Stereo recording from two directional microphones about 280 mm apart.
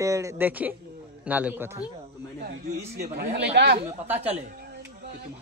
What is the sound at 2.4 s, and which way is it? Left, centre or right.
Speech, right.